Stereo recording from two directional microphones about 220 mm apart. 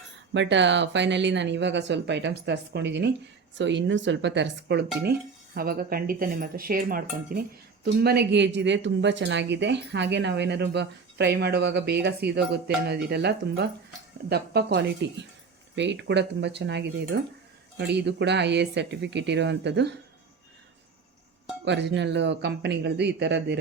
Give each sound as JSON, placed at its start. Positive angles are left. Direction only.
{"t": 0.3, "sound": "speech", "side_deg": -55}
{"t": 21.6, "sound": "speech", "side_deg": -50}